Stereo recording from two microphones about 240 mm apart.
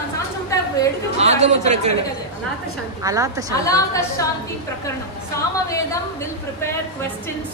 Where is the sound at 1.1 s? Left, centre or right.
Right.